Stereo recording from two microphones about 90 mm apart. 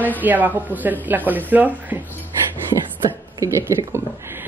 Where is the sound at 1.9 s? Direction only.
20° right (ahead or behind).